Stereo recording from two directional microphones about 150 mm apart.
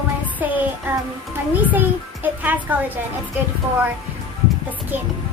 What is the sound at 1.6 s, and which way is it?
A child's voice, 10° right (ahead or behind).